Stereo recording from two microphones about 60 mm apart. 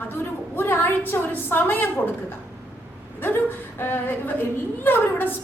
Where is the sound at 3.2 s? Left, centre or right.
Left.